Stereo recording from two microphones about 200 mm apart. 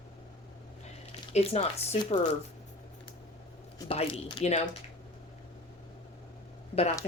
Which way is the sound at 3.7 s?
25° left (ahead or behind).